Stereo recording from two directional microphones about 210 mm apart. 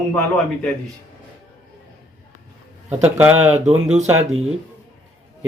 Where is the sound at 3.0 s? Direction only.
10° right (ahead or behind).